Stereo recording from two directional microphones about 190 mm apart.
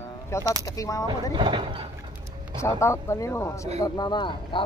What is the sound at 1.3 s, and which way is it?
Speech, 25° right (ahead or behind).